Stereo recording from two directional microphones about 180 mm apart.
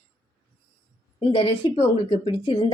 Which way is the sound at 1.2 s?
30° left (ahead or behind).